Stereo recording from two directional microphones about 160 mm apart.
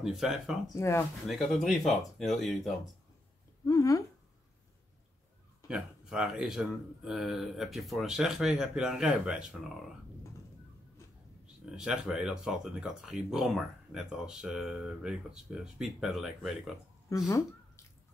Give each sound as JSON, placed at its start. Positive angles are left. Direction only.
{"t": 0.0, "sound": "speech", "side_deg": 0}
{"t": 0.7, "sound": "speech", "side_deg": 15}
{"t": 1.2, "sound": "speech", "side_deg": 0}
{"t": 3.6, "sound": "a sound", "side_deg": 20}
{"t": 5.7, "sound": "speech", "side_deg": -5}
{"t": 11.4, "sound": "speech", "side_deg": -5}
{"t": 17.1, "sound": "speech", "side_deg": 20}